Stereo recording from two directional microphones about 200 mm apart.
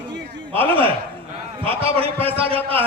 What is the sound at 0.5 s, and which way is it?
A man's voice, 25° right (ahead or behind).